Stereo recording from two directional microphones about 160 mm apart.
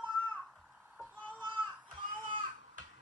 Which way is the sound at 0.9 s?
10° right (ahead or behind).